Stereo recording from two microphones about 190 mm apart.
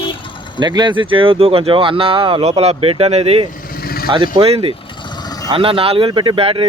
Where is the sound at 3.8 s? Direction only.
55° left (ahead or behind).